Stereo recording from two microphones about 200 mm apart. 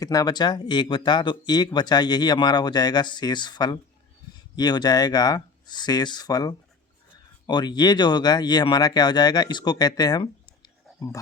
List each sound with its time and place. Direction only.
0.0 s speech: 15° left (ahead or behind)